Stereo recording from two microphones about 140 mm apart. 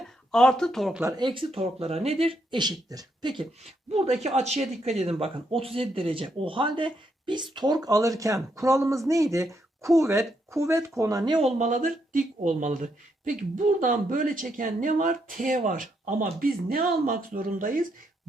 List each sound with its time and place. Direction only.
0.0 s speech: 5° left (ahead or behind)
1.0 s speech: 30° right (ahead or behind)
4.2 s speech: 50° right (ahead or behind); by 11.3 s 25° right (ahead or behind)
11.3 s speech: 50° right (ahead or behind); by 17.8 s 75° right (ahead or behind)